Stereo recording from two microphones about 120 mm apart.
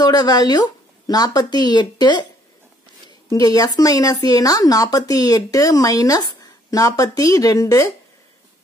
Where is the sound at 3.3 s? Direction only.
30° left (ahead or behind).